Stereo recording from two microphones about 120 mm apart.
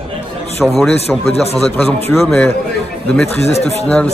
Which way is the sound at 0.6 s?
5° left (ahead or behind).